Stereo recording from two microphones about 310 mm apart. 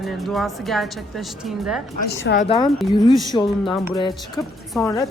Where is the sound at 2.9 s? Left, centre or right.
Centre.